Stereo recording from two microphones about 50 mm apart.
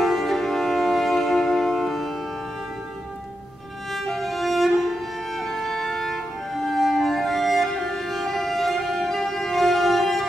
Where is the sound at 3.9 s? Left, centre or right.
Centre.